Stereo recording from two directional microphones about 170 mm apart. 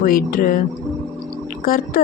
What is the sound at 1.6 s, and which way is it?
Speech, 55° left (ahead or behind).